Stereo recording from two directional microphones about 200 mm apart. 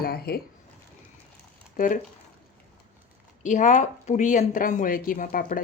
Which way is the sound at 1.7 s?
40° left (ahead or behind).